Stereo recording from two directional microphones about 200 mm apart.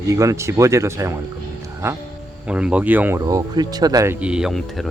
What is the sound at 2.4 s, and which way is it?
Speech, 5° right (ahead or behind).